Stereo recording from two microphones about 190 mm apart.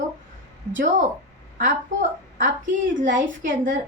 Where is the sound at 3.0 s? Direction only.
45° right (ahead or behind).